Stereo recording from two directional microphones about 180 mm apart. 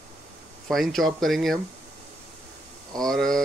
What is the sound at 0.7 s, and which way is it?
Speech, centre (ahead or behind).